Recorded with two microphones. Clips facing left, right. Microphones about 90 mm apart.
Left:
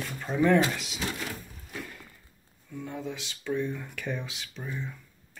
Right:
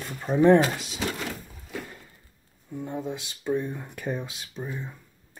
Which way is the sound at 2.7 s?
25° right (ahead or behind).